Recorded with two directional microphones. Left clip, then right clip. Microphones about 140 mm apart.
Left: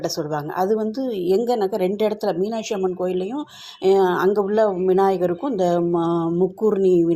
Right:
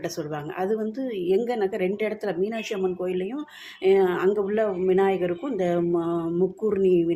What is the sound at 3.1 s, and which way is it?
Speech, 30° left (ahead or behind).